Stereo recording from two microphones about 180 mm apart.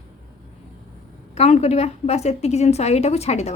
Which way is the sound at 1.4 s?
40° left (ahead or behind).